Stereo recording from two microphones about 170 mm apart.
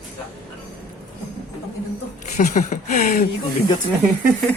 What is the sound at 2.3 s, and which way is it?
Speech, 45° left (ahead or behind).